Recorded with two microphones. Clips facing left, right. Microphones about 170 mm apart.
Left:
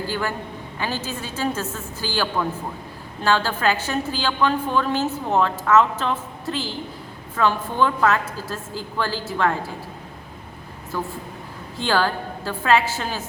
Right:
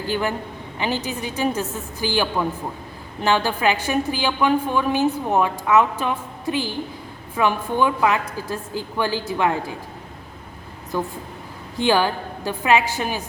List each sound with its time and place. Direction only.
0.1 s a woman's voice: 20° right (ahead or behind)
10.9 s a woman's voice: 20° right (ahead or behind)